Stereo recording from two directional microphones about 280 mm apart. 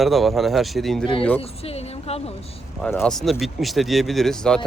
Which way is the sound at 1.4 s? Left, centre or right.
Left.